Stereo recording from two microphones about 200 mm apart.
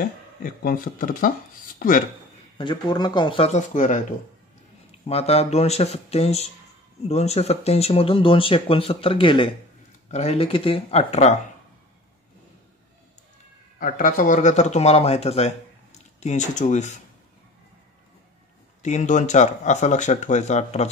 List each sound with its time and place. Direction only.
0.0 s speech: 45° left (ahead or behind)
2.5 s speech: 25° left (ahead or behind)
5.0 s speech: 30° left (ahead or behind)
13.7 s speech: 45° left (ahead or behind)
18.8 s speech: 35° left (ahead or behind)